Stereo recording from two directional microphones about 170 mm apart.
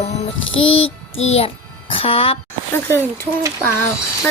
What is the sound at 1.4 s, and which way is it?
A child's voice, 35° left (ahead or behind).